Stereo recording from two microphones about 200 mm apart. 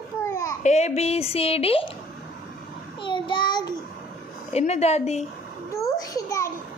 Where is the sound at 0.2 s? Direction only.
15° left (ahead or behind).